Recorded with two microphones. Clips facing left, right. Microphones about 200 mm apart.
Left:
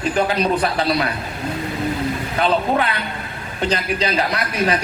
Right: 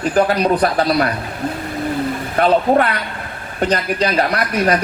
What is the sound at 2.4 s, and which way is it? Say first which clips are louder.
A man's voice: right 5 dB; 45° right (ahead or behind).